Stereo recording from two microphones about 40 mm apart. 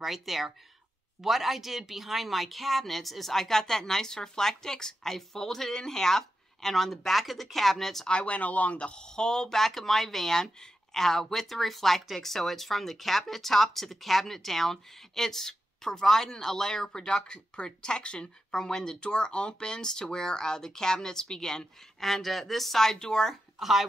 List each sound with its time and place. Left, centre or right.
0.0 s speech: centre
8.1 s speech: left
8.4 s speech: left
18.5 s speech: centre
23.6 s speech: centre